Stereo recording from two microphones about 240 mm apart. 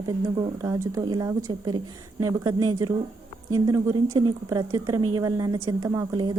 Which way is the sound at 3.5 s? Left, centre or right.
Centre.